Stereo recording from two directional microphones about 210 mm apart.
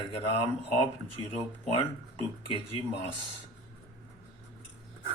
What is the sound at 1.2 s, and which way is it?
Speech, 25° left (ahead or behind).